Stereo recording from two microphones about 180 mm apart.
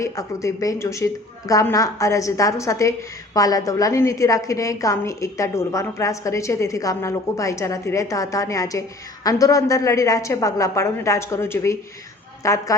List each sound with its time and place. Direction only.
0.0 s a woman's voice: 15° left (ahead or behind)